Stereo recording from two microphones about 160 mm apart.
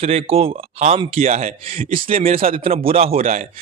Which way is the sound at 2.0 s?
35° right (ahead or behind).